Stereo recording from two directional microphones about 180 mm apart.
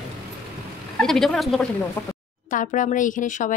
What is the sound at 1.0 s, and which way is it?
Speech, 5° left (ahead or behind).